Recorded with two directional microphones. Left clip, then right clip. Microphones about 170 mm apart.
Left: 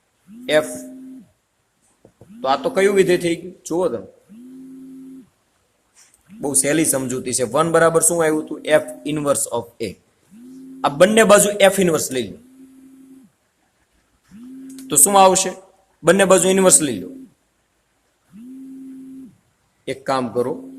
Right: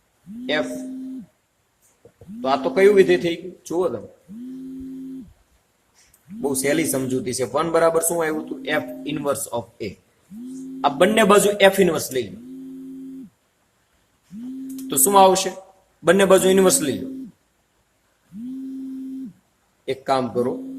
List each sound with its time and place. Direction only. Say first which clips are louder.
2.4 s speech: even; 60° left (ahead or behind)
6.5 s speech: left 3 dB; 55° left (ahead or behind)
14.8 s a man's voice: left 2 dB; 50° left (ahead or behind)
19.8 s a man's voice: even; 45° left (ahead or behind)